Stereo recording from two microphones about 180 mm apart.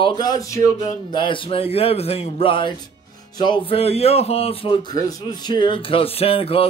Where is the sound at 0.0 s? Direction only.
20° left (ahead or behind).